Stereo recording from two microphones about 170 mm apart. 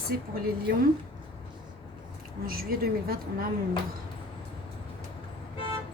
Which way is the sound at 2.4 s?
60° right (ahead or behind).